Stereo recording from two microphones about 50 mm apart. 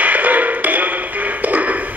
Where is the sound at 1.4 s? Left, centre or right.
Right.